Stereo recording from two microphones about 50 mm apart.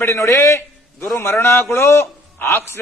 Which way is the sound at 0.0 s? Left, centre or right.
Left.